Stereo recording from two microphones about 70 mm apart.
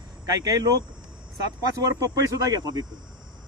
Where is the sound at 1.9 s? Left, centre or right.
Right.